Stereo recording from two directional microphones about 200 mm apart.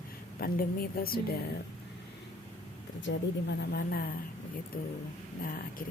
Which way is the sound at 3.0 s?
55° left (ahead or behind).